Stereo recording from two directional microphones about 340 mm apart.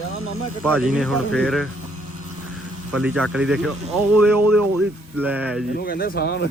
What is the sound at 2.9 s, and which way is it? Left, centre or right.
Speech, centre.